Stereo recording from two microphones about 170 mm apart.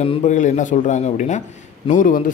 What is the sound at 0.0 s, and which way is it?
A man's voice, 40° left (ahead or behind).